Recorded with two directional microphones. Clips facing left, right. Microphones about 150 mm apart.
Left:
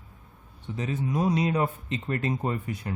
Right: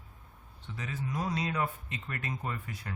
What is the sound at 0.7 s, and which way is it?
Speech, 25° left (ahead or behind).